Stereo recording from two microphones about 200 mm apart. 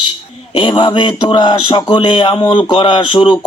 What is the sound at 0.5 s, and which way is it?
Speech, 25° left (ahead or behind).